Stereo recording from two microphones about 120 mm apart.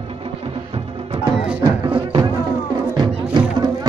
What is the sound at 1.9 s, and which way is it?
Music, 45° right (ahead or behind).